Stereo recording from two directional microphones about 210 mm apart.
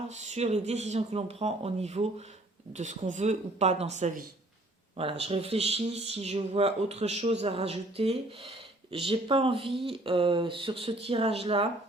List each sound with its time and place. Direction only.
0.1 s speech: 30° right (ahead or behind)